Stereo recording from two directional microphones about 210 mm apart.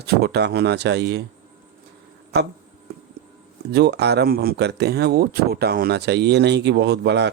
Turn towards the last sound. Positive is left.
turn(degrees=-55)  # may be behind; listen again after turning